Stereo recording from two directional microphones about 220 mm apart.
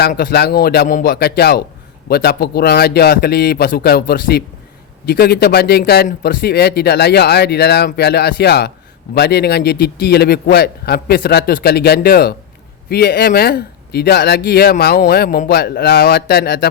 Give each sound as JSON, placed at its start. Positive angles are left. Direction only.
{"t": 0.0, "sound": "a man's voice", "side_deg": 45}